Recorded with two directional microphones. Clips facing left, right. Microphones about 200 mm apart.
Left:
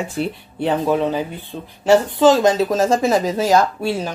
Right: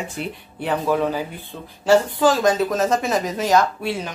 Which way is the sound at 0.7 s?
20° left (ahead or behind).